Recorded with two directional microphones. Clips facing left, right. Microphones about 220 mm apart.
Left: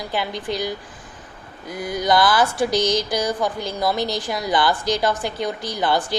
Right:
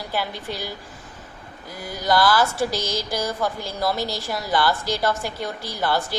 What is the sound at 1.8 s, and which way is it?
Speech, 20° left (ahead or behind).